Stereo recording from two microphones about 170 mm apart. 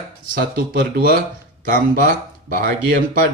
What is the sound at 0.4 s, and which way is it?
Speech, 65° right (ahead or behind).